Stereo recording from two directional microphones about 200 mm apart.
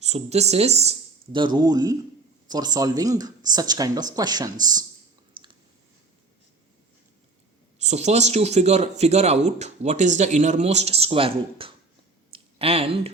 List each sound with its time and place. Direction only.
0.0 s speech: 35° right (ahead or behind)
7.8 s speech: 35° right (ahead or behind)
12.3 s a sound: 30° right (ahead or behind)